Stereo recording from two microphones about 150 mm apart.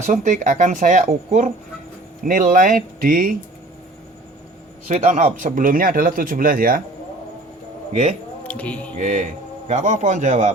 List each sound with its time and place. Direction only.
0.0 s speech: 50° right (ahead or behind)
2.2 s speech: 65° right (ahead or behind)
4.9 s speech: 55° right (ahead or behind); by 6.8 s 70° right (ahead or behind)
8.4 s speech: 10° left (ahead or behind)
9.0 s a man's voice: 60° right (ahead or behind)